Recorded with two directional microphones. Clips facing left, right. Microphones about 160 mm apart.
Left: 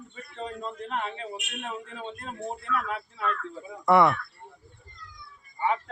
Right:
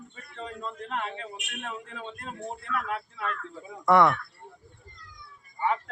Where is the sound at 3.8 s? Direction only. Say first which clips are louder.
Even; 5° left (ahead or behind).